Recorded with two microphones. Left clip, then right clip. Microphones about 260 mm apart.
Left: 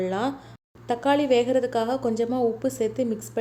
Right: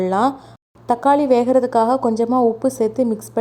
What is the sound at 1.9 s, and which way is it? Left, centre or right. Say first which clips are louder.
Speech: right 8 dB; centre.